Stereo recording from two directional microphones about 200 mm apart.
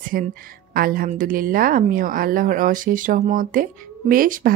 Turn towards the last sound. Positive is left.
turn(degrees=-45)  # may be behind; listen again after turning